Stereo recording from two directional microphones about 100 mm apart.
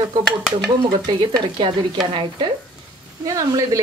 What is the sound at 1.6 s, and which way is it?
Stir, 55° right (ahead or behind).